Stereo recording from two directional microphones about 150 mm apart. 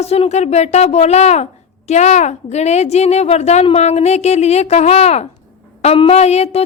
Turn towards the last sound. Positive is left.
turn(degrees=45)  # may be behind; listen again after turning